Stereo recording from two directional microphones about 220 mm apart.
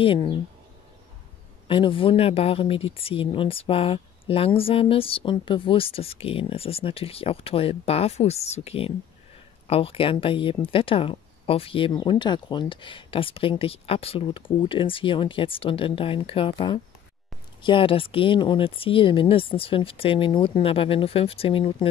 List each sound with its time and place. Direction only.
0.0 s speech: 25° left (ahead or behind)
1.7 s speech: 25° left (ahead or behind)